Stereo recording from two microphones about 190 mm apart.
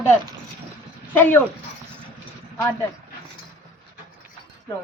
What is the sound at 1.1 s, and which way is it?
Speech, 10° left (ahead or behind).